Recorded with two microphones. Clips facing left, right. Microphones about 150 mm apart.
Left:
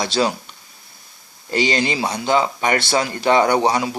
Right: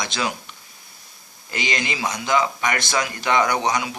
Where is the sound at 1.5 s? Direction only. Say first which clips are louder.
Left 7 dB; 35° left (ahead or behind).